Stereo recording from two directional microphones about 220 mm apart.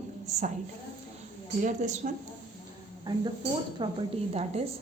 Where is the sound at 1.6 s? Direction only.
35° right (ahead or behind).